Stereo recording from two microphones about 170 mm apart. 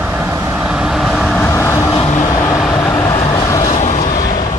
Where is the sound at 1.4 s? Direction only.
15° left (ahead or behind).